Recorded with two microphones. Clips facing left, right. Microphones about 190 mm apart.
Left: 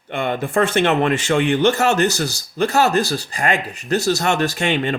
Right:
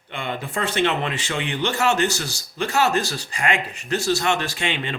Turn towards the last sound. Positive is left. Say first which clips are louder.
# left 7 dB
turn(degrees=45)  # may be behind; listen again after turning